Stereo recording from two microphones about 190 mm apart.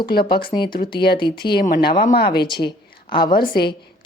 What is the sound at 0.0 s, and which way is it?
Speech, 55° left (ahead or behind).